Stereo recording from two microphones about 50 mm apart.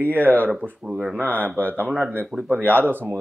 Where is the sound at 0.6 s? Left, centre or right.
Centre.